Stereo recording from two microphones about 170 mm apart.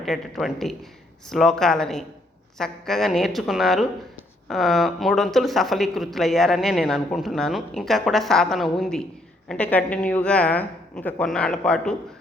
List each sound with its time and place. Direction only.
0.0 s a woman's voice: centre (ahead or behind)